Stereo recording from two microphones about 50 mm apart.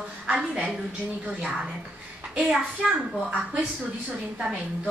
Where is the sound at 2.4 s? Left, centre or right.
Centre.